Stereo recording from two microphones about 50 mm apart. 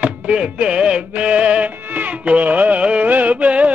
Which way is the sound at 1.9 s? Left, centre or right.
Right.